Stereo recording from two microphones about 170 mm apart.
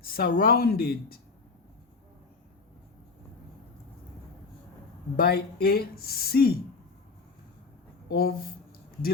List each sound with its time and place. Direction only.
0.0 s speech: 60° left (ahead or behind)
5.1 s speech: 65° left (ahead or behind)
8.1 s speech: 65° left (ahead or behind)